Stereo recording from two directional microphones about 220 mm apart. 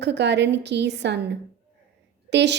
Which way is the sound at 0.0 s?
50° right (ahead or behind).